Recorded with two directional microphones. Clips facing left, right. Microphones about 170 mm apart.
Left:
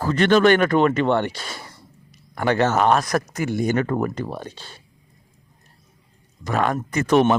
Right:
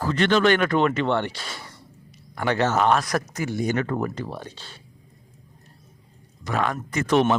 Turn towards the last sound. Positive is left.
turn(degrees=50)  # may be behind; listen again after turning